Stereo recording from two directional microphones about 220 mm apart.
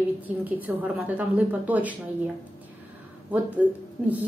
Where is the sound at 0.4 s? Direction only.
5° right (ahead or behind).